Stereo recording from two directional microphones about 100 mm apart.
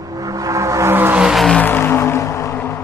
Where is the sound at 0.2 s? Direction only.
35° right (ahead or behind).